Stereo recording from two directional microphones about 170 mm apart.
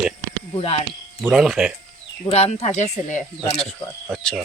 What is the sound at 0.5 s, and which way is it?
Speech, 35° left (ahead or behind).